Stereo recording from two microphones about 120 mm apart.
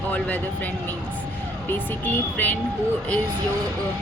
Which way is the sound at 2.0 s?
15° left (ahead or behind).